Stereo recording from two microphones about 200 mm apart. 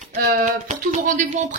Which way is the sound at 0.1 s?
50° right (ahead or behind).